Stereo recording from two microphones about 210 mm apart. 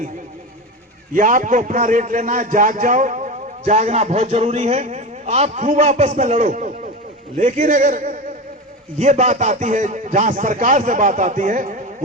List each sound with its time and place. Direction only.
1.1 s a man's voice: 40° right (ahead or behind)